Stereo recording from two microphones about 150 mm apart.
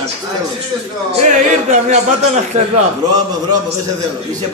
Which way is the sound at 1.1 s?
50° right (ahead or behind).